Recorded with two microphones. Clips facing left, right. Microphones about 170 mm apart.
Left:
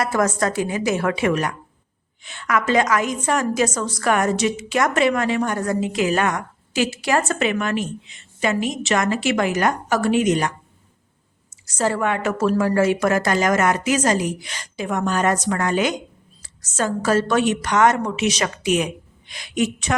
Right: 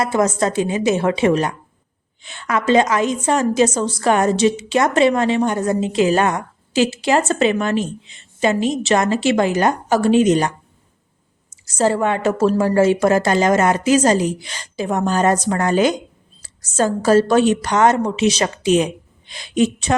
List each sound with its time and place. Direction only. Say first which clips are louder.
0.0 s a woman's voice: right 3 dB; 25° right (ahead or behind)
11.8 s a woman's voice: right 4 dB; 30° right (ahead or behind)